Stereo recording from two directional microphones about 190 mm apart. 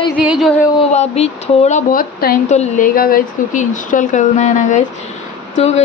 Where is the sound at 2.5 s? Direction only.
40° left (ahead or behind).